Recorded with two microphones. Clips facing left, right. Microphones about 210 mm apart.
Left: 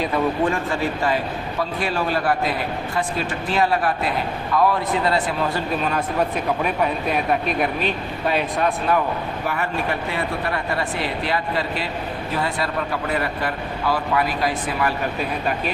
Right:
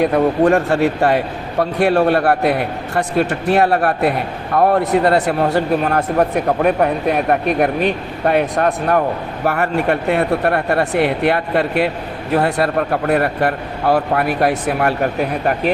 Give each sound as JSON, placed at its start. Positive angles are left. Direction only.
{"t": 0.0, "sound": "a man's voice", "side_deg": -60}